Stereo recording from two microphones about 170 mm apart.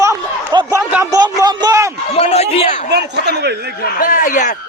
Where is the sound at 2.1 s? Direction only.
35° left (ahead or behind).